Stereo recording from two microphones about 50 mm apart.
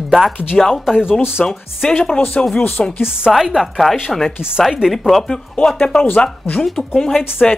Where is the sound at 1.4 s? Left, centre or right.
Centre.